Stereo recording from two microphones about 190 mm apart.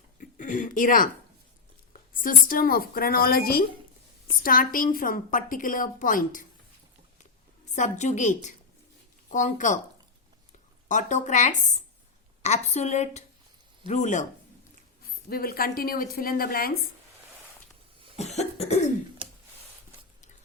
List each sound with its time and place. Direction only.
0.2 s a sound: 45° left (ahead or behind)
1.9 s a woman's voice: 45° left (ahead or behind)
7.8 s a woman's voice: 40° left (ahead or behind)
10.8 s a woman's voice: 40° left (ahead or behind)
15.3 s a woman's voice: 50° left (ahead or behind)
18.2 s cough: 35° left (ahead or behind)
19.2 s a sound: 30° right (ahead or behind)